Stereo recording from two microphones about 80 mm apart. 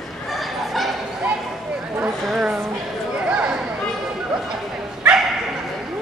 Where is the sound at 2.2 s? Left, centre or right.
Centre.